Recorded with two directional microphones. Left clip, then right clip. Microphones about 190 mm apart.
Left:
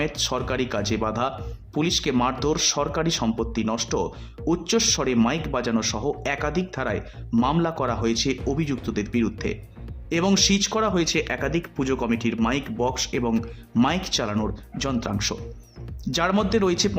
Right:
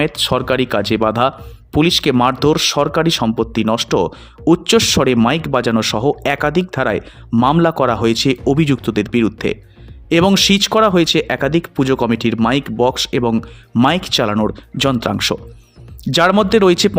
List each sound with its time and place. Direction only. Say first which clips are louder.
0.0 s speech: right 9 dB; 40° right (ahead or behind)